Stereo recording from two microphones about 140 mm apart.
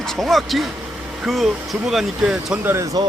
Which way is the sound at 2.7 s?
25° right (ahead or behind).